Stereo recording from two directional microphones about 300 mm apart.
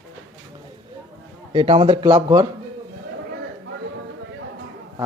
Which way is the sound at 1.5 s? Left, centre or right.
Centre.